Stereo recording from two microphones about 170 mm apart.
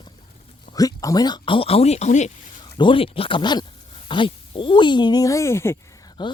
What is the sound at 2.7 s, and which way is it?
Speech, 30° left (ahead or behind).